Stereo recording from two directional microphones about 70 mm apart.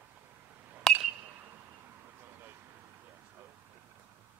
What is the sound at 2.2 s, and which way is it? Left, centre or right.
Vehicle, right.